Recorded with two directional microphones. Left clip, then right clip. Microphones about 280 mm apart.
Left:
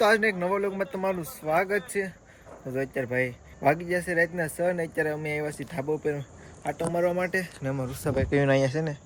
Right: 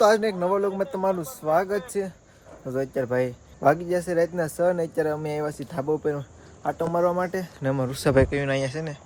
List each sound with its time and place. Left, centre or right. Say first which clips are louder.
0.1 s speech: right 2 dB; centre
7.6 s speech: right 6 dB; centre
7.9 s speech: right 10 dB; right
8.3 s speech: left 2 dB; centre